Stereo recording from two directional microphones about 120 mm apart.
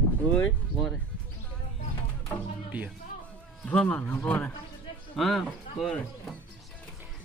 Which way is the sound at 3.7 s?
10° left (ahead or behind).